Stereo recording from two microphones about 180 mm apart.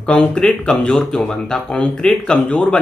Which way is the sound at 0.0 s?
5° left (ahead or behind).